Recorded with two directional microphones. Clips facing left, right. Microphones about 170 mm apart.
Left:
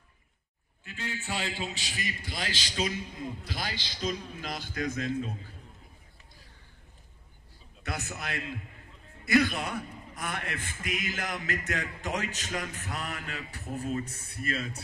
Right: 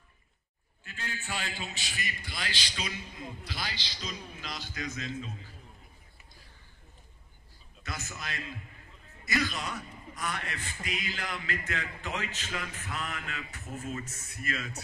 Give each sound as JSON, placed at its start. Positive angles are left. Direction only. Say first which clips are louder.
{"t": 0.8, "sound": "a man's voice", "louder": "left 3 dB", "side_deg": 20}
{"t": 7.8, "sound": "a man's voice", "louder": "left 4 dB", "side_deg": 65}